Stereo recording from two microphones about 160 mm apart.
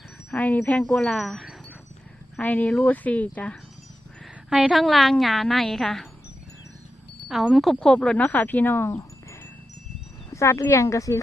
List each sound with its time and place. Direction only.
0.3 s a woman's voice: 10° left (ahead or behind)
4.4 s a woman's voice: centre (ahead or behind)
7.3 s speech: centre (ahead or behind); by 11.2 s 20° left (ahead or behind)